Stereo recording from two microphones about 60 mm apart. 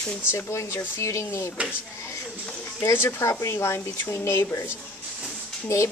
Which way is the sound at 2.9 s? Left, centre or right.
Left.